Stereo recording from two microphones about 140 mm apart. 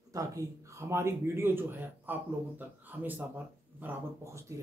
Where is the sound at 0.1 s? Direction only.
25° right (ahead or behind).